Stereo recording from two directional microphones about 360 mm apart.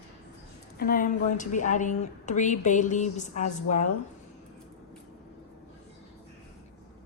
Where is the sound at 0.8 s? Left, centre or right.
Left.